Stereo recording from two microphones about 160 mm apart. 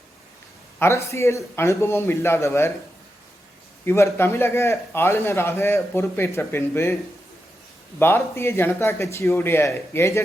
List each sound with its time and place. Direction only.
0.8 s a man's voice: 15° left (ahead or behind)
3.8 s a man's voice: 15° left (ahead or behind)
7.9 s a man's voice: 15° left (ahead or behind)